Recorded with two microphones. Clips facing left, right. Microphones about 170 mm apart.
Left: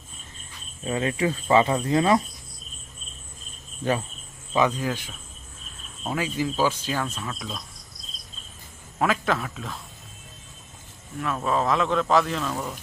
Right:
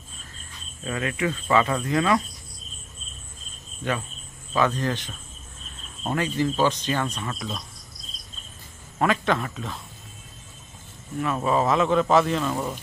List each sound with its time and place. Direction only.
0.9 s speech: 30° left (ahead or behind)
4.5 s speech: 15° left (ahead or behind)
9.0 s speech: centre (ahead or behind)
11.2 s speech: centre (ahead or behind)